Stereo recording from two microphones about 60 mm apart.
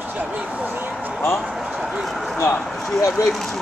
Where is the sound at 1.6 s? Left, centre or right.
Centre.